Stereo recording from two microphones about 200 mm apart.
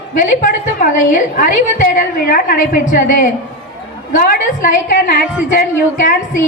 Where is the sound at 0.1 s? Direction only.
40° left (ahead or behind).